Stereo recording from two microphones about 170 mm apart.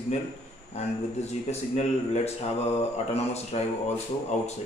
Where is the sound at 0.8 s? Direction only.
40° left (ahead or behind).